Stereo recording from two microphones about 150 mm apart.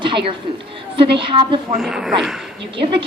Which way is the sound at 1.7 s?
5° right (ahead or behind).